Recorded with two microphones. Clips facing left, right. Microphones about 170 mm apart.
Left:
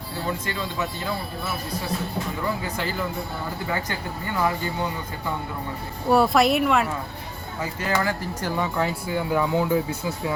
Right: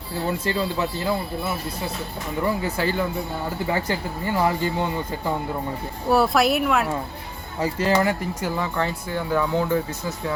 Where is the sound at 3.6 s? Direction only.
25° right (ahead or behind).